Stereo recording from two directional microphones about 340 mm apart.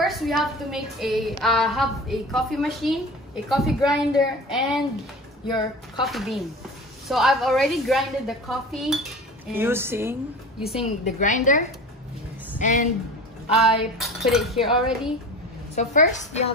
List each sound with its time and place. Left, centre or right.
0.0 s a woman's voice: centre
6.0 s a woman's voice: centre
10.8 s a woman's voice: left
13.6 s a woman's voice: centre
15.7 s a woman's voice: left